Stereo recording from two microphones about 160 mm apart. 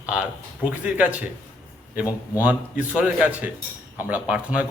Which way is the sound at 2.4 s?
10° right (ahead or behind).